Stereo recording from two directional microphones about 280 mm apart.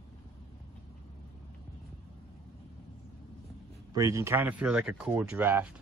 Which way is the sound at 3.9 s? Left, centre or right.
Centre.